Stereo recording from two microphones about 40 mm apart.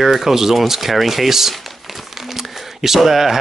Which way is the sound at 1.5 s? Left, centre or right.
Centre.